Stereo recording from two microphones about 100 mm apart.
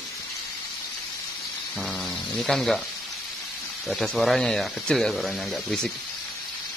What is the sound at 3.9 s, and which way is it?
A man's voice, centre (ahead or behind).